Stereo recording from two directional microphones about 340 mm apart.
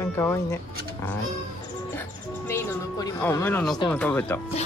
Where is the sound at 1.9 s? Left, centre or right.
Centre.